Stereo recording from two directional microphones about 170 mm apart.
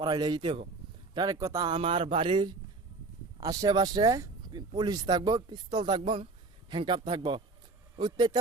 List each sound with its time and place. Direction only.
0.0 s speech: 20° right (ahead or behind)